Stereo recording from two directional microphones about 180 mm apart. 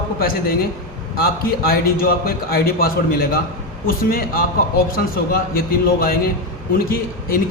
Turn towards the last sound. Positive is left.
turn(degrees=55)  # may be behind; listen again after turning